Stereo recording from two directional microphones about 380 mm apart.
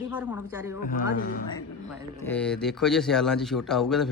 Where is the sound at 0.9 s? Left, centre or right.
Left.